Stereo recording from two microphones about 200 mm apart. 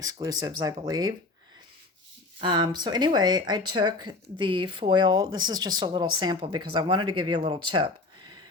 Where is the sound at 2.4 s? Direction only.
20° right (ahead or behind).